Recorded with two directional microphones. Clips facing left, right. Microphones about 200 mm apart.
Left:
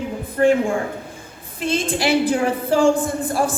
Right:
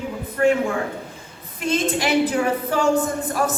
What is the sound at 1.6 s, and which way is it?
A woman's voice, 30° left (ahead or behind).